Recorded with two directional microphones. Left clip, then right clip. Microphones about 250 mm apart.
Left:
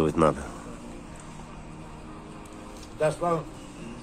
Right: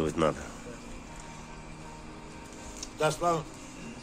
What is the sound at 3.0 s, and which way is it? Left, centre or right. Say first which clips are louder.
Speech: left 2 dB; right.